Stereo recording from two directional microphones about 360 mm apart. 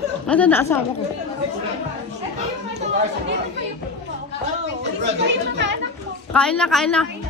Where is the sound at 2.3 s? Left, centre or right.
Centre.